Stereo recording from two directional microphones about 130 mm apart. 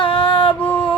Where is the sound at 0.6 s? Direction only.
15° left (ahead or behind).